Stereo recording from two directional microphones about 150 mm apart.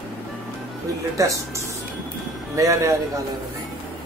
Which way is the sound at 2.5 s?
20° right (ahead or behind).